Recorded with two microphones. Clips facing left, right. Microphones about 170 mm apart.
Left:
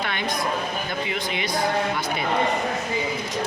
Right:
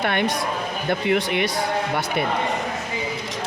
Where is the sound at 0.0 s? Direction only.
60° right (ahead or behind).